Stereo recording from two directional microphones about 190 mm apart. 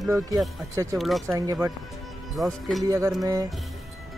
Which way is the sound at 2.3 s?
Centre (ahead or behind).